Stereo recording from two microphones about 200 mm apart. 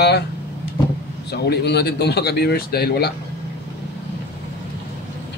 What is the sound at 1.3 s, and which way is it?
Speech, 55° left (ahead or behind).